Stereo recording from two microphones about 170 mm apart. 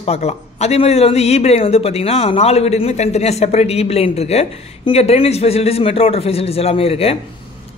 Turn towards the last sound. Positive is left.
turn(degrees=35)  # may be behind; listen again after turning